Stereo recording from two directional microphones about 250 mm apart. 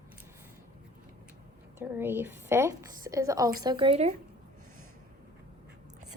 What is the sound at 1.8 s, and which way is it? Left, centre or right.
A woman's voice, centre.